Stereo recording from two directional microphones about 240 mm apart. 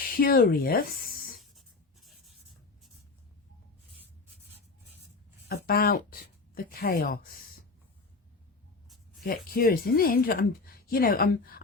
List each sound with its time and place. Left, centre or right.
0.0 s speech: left
1.4 s writing: centre
5.5 s speech: left
9.2 s speech: left